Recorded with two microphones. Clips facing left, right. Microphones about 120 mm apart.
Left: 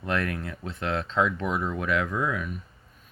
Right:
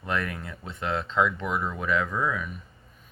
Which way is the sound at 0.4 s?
Centre (ahead or behind).